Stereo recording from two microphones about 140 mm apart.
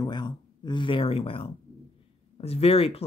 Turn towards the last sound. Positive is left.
turn(degrees=45)  # may be behind; listen again after turning